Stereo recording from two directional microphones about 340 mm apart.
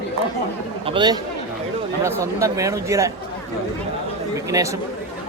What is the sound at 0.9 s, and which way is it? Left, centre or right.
Speech, centre.